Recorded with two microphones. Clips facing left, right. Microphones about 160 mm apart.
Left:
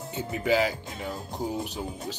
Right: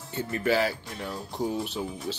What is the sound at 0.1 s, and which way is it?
A man's voice, 15° left (ahead or behind).